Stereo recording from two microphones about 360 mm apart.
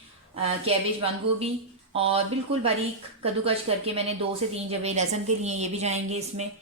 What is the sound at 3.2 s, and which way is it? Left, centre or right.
A woman's voice, centre.